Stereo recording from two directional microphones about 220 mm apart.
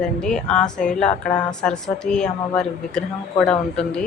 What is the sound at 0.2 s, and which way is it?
A woman's voice, 5° left (ahead or behind).